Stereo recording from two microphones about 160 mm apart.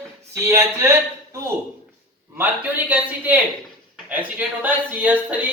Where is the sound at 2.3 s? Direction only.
10° right (ahead or behind).